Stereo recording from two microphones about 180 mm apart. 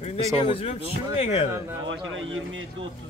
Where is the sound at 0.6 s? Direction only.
35° left (ahead or behind).